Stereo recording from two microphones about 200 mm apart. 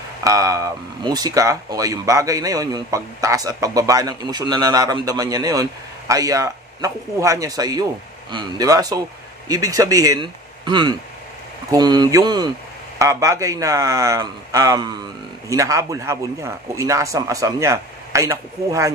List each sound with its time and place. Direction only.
0.2 s speech: 15° right (ahead or behind)